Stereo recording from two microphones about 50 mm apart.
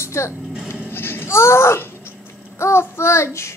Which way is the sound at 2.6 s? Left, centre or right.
Left.